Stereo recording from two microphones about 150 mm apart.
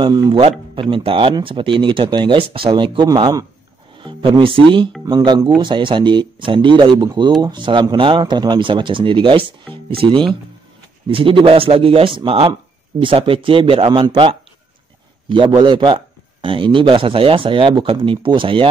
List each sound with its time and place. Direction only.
0.0 s a man's voice: 30° right (ahead or behind)
4.0 s a man's voice: 35° right (ahead or behind)